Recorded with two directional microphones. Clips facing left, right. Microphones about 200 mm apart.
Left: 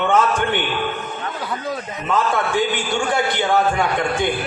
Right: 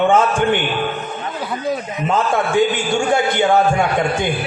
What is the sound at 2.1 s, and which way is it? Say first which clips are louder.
A man's voice: right 3 dB; 45° right (ahead or behind).